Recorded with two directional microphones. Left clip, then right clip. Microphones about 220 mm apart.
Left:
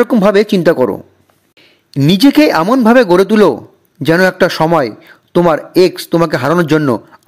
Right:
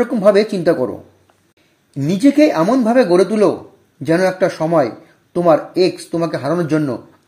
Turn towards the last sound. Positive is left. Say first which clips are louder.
# left 6 dB
turn(degrees=40)  # may be behind; listen again after turning